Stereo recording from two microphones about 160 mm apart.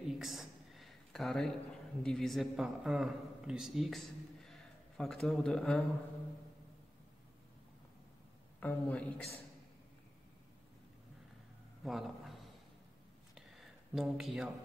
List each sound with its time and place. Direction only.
0.0 s speech: centre (ahead or behind)
8.5 s a man's voice: 10° left (ahead or behind)
11.8 s speech: centre (ahead or behind)
13.3 s a sound: centre (ahead or behind)